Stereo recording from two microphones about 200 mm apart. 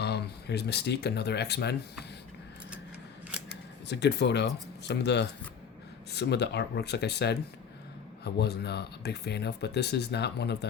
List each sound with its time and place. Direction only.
0.0 s speech: 55° left (ahead or behind)
3.8 s speech: 60° left (ahead or behind)